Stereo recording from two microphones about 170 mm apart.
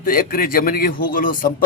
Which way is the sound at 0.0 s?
55° left (ahead or behind).